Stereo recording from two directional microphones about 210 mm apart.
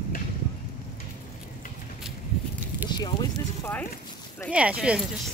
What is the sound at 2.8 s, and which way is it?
Speech, 20° left (ahead or behind).